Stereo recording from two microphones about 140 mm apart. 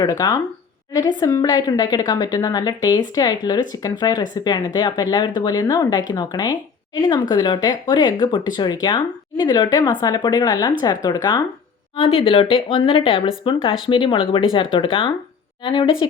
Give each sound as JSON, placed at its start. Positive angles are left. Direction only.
{"t": 0.0, "sound": "a woman's voice", "side_deg": 25}
{"t": 11.9, "sound": "speech", "side_deg": 40}